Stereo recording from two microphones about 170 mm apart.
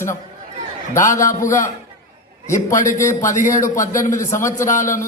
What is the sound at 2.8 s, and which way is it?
A man's voice, 50° left (ahead or behind).